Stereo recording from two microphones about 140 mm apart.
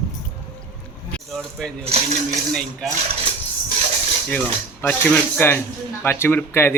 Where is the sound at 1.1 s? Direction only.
5° left (ahead or behind).